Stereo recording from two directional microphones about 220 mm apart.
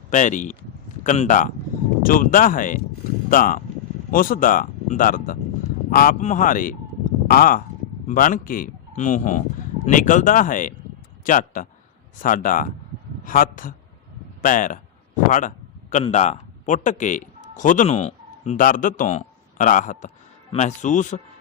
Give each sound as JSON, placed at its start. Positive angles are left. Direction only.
{"t": 0.1, "sound": "a man's voice", "side_deg": 35}